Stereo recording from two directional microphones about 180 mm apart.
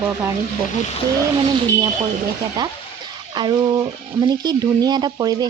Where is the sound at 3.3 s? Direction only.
25° right (ahead or behind).